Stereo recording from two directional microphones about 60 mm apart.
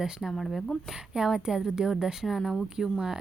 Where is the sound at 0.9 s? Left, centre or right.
Centre.